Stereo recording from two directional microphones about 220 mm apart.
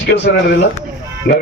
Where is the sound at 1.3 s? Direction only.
40° left (ahead or behind).